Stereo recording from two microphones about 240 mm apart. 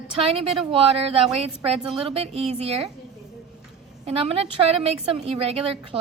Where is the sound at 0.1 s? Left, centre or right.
Right.